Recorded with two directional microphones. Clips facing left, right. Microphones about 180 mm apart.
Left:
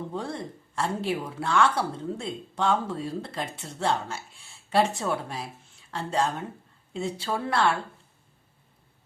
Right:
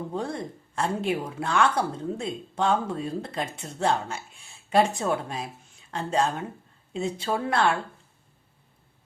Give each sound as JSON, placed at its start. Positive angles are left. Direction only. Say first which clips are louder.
{"t": 0.1, "sound": "a woman's voice", "louder": "right 2 dB", "side_deg": -20}